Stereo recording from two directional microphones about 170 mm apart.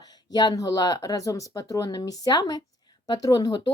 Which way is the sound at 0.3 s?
25° left (ahead or behind).